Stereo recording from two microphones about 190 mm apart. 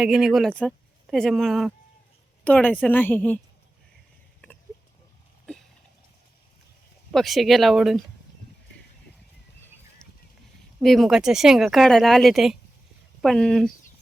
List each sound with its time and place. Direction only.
0.0 s a woman's voice: centre (ahead or behind)
7.1 s speech: centre (ahead or behind)
10.0 s a sound: centre (ahead or behind)
10.8 s speech: centre (ahead or behind)